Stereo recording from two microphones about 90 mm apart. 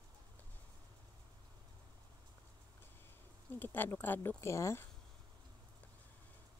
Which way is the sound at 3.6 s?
20° left (ahead or behind).